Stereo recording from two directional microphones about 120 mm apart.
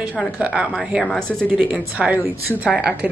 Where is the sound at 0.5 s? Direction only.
Centre (ahead or behind).